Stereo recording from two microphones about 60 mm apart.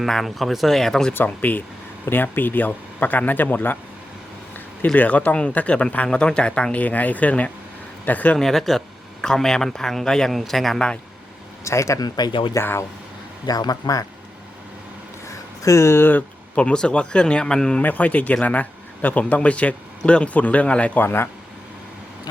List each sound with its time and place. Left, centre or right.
0.0 s speech: centre
1.1 s speech: left
4.9 s speech: left
8.4 s speech: centre
11.6 s speech: left
12.5 s speech: left
13.5 s a man's voice: left
15.3 s a sound: left
16.6 s speech: centre
17.8 s speech: left
21.0 s speech: left